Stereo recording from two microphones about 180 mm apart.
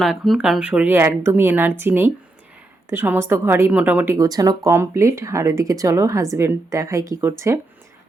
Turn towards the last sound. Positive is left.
turn(degrees=-15)  # may be behind; listen again after turning